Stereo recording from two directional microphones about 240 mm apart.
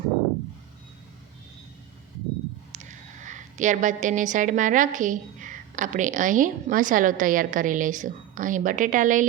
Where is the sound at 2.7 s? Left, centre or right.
Right.